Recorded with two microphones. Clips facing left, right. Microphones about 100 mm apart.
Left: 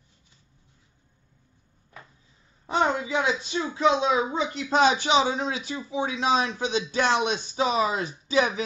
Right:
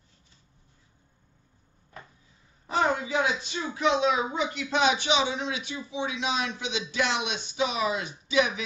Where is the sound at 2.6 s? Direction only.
30° left (ahead or behind).